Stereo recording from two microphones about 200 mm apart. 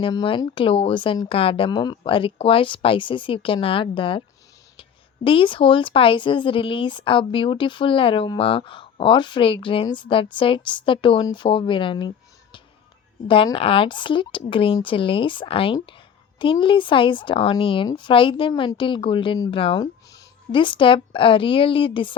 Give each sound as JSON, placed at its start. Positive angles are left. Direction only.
{"t": 0.0, "sound": "speech", "side_deg": 25}